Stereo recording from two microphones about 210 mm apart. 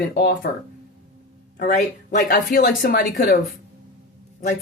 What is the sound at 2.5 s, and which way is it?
Speech, 45° left (ahead or behind).